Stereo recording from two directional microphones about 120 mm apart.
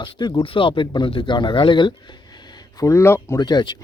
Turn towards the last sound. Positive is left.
turn(degrees=35)  # may be behind; listen again after turning